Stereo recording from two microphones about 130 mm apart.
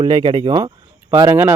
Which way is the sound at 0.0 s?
35° right (ahead or behind).